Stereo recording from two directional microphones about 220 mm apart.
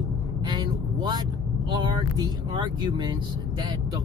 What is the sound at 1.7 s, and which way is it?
Speech, 20° right (ahead or behind).